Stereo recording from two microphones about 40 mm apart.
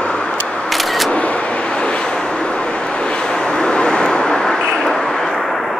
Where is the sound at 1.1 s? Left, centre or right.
Left; by 5.3 s centre.